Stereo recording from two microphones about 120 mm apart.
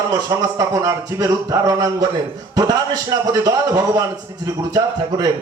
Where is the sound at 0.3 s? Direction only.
25° right (ahead or behind).